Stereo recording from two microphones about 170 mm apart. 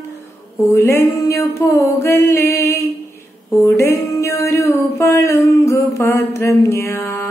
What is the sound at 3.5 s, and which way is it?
Music, 15° left (ahead or behind).